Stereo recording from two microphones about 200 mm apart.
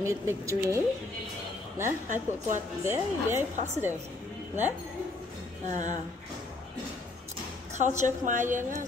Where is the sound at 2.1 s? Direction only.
40° right (ahead or behind).